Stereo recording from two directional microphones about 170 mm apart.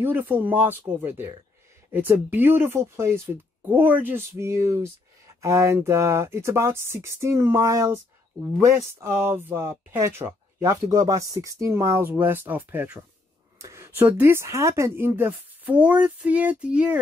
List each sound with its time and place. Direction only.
0.0 s speech: 10° right (ahead or behind)